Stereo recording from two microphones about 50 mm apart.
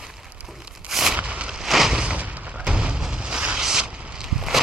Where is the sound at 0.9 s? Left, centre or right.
Centre.